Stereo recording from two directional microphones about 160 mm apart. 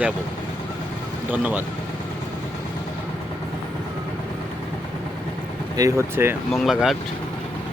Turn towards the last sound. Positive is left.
turn(degrees=0)  # may be behind; listen again after turning